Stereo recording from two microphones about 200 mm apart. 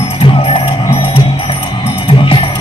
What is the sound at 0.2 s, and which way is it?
Music, 25° left (ahead or behind).